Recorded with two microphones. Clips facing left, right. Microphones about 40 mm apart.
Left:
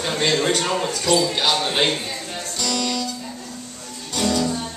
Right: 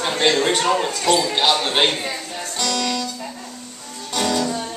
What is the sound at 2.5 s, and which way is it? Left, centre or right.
Music, right.